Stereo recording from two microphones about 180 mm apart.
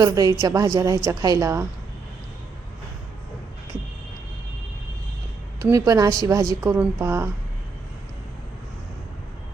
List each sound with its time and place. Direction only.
0.0 s a woman's voice: 20° right (ahead or behind)
5.5 s a woman's voice: 20° right (ahead or behind)